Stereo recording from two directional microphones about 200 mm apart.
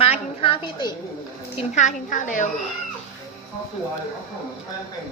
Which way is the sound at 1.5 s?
35° left (ahead or behind).